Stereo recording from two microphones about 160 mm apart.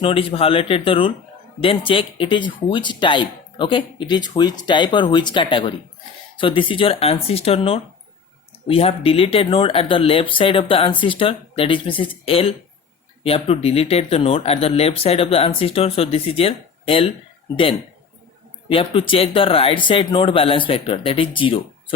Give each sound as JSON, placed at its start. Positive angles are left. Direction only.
{"t": 0.0, "sound": "speech", "side_deg": 35}
{"t": 18.7, "sound": "speech", "side_deg": 35}